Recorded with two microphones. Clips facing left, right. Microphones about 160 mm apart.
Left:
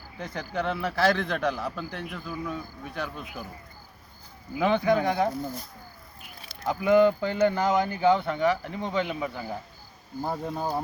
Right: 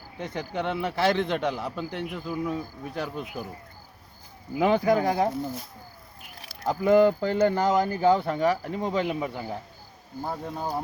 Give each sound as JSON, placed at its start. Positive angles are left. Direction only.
{"t": 0.2, "sound": "a man's voice", "side_deg": -25}
{"t": 2.5, "sound": "speech", "side_deg": -35}
{"t": 4.5, "sound": "speech", "side_deg": -40}
{"t": 5.3, "sound": "speech", "side_deg": 0}
{"t": 6.7, "sound": "speech", "side_deg": -35}
{"t": 10.2, "sound": "speech", "side_deg": 5}